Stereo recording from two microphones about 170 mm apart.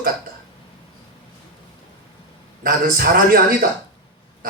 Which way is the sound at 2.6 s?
60° right (ahead or behind).